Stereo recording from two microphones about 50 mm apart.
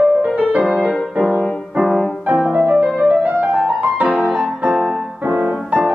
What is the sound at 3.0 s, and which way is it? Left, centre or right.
Music, right.